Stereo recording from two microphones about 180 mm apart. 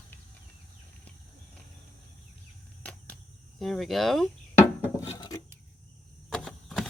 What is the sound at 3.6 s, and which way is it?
Speech, centre (ahead or behind).